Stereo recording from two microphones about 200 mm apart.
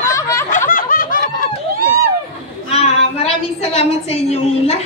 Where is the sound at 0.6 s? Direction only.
45° left (ahead or behind).